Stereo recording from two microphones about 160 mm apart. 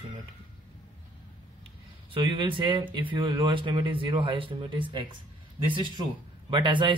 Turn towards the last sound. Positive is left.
turn(degrees=-30)  # may be behind; listen again after turning